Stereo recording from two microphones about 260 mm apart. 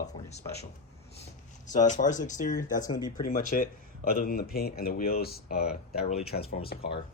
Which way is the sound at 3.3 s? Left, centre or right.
Left.